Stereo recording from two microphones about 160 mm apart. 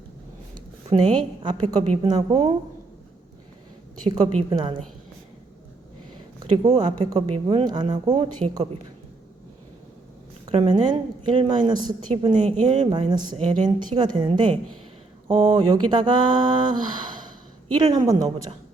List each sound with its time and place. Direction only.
0.9 s a woman's voice: 30° right (ahead or behind)
2.3 s speech: 45° right (ahead or behind)
4.1 s a woman's voice: 30° right (ahead or behind)
6.4 s a woman's voice: 25° right (ahead or behind)
8.4 s a woman's voice: 40° right (ahead or behind)
10.5 s a woman's voice: 35° right (ahead or behind)
12.6 s speech: 45° right (ahead or behind)
12.9 s a woman's voice: 25° right (ahead or behind)